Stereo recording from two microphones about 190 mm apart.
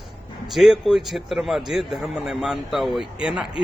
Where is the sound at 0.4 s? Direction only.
Centre (ahead or behind).